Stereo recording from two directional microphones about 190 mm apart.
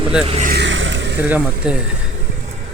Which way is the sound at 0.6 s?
75° right (ahead or behind).